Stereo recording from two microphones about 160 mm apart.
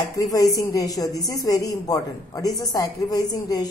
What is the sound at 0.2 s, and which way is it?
A woman's voice, 20° left (ahead or behind).